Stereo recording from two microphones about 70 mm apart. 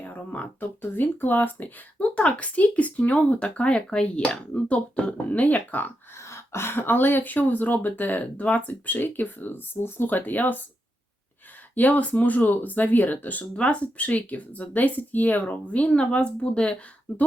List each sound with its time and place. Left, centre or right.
0.0 s speech: left
6.1 s speech: left
11.7 s speech: left